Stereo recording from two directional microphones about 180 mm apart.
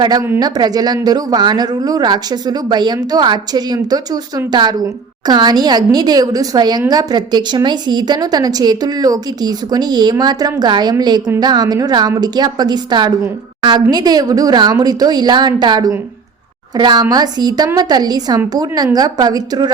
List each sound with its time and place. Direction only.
0.0 s a woman's voice: 20° right (ahead or behind)